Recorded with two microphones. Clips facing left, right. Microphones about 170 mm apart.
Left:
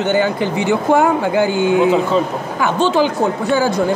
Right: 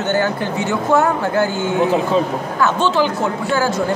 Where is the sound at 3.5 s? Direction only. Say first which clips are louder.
Left 2 dB; 20° left (ahead or behind).